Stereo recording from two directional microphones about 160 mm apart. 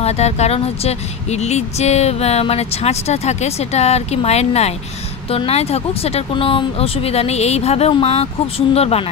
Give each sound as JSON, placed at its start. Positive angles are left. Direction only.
{"t": 0.0, "sound": "speech", "side_deg": 40}